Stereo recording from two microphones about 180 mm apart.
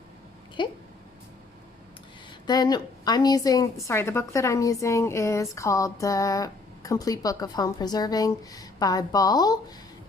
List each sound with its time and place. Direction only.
0.6 s a woman's voice: 25° left (ahead or behind)
2.5 s a woman's voice: 25° left (ahead or behind)